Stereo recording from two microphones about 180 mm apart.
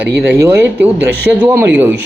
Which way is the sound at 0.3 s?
10° right (ahead or behind).